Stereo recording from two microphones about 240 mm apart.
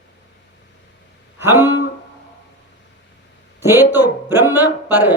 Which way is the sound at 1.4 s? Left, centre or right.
Centre.